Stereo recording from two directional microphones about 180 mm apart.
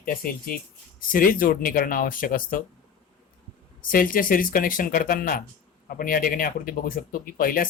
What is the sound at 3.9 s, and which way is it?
Speech, 50° left (ahead or behind).